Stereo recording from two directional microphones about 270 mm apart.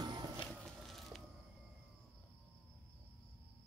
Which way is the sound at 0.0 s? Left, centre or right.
Centre.